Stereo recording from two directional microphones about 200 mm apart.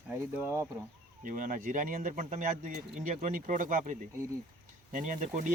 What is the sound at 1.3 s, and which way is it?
Speech, 40° right (ahead or behind).